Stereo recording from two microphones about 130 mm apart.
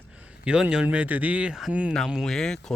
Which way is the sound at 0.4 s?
5° right (ahead or behind).